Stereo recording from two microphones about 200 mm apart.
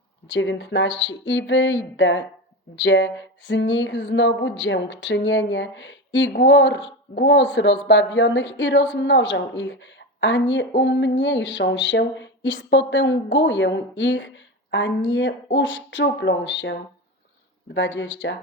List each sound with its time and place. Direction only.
0.3 s speech: 70° left (ahead or behind)
2.0 s a sound: 65° left (ahead or behind)
15.5 s speech: 65° left (ahead or behind)
17.7 s speech: 70° left (ahead or behind)